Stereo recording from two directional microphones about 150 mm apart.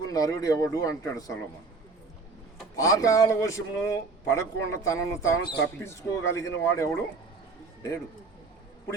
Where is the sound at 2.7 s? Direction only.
20° left (ahead or behind).